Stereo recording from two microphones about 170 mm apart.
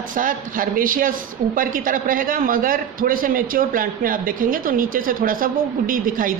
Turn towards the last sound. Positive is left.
turn(degrees=-55)  # may be behind; listen again after turning